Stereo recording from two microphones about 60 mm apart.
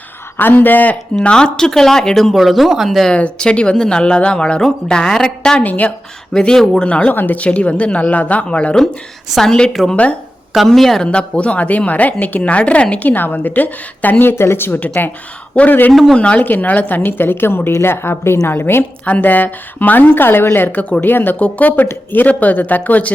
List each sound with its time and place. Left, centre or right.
0.3 s speech: left
1.2 s speech: centre
3.1 s speech: centre
5.6 s a woman's voice: left
6.3 s a woman's voice: centre
7.1 s a woman's voice: left
9.3 s a woman's voice: centre
9.9 s a woman's voice: left
10.7 s a woman's voice: centre
11.0 s a woman's voice: centre
15.9 s a woman's voice: centre
16.1 s a woman's voice: centre
17.0 s speech: left
21.3 s a woman's voice: left